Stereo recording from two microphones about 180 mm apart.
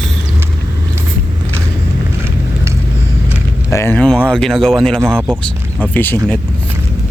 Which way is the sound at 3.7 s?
15° left (ahead or behind).